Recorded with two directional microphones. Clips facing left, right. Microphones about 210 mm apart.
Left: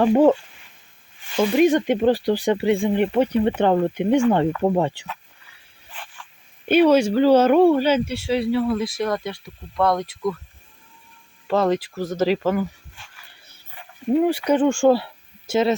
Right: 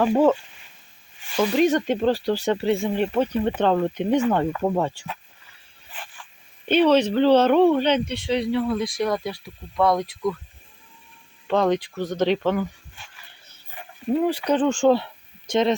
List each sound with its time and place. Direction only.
0.0 s speech: 15° left (ahead or behind)
1.4 s speech: 10° left (ahead or behind)
6.7 s speech: 10° left (ahead or behind)
11.4 s speech: 5° left (ahead or behind)
14.1 s speech: 10° left (ahead or behind)